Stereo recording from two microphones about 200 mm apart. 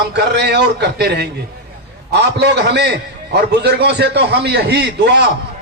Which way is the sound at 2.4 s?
60° right (ahead or behind).